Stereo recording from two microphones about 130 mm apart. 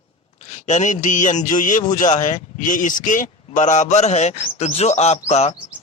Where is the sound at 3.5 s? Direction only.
65° left (ahead or behind).